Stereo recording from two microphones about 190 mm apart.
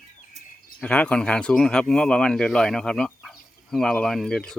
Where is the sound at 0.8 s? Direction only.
5° left (ahead or behind).